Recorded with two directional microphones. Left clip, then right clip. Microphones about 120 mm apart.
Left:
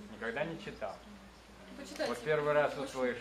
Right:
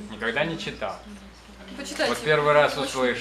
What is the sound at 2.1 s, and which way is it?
Speech, 30° right (ahead or behind).